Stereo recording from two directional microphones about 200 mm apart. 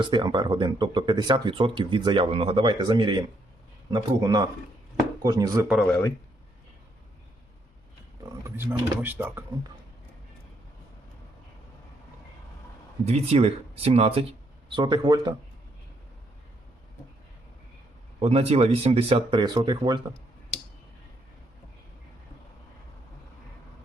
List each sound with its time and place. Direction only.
0.0 s speech: 25° right (ahead or behind)
5.9 s speech: 15° left (ahead or behind)
8.2 s speech: 15° right (ahead or behind)
13.1 s speech: 30° right (ahead or behind)
18.2 s speech: 30° right (ahead or behind)